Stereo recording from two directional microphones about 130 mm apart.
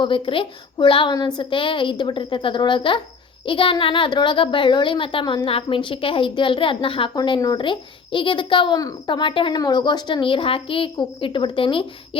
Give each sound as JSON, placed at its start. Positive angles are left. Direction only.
{"t": 0.0, "sound": "a woman's voice", "side_deg": 40}
{"t": 7.2, "sound": "a woman's voice", "side_deg": 30}